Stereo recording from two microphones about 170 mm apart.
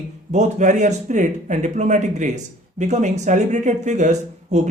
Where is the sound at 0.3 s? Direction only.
45° right (ahead or behind).